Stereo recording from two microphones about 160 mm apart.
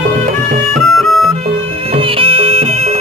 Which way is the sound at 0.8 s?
Centre (ahead or behind).